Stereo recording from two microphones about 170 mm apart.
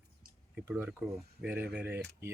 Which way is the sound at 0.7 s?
10° right (ahead or behind).